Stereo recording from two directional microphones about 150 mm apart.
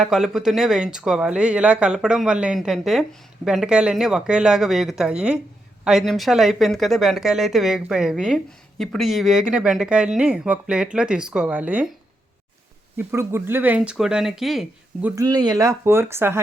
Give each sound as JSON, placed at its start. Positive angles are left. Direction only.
{"t": 0.0, "sound": "speech", "side_deg": -5}
{"t": 13.0, "sound": "speech", "side_deg": -15}
{"t": 15.1, "sound": "speech", "side_deg": -25}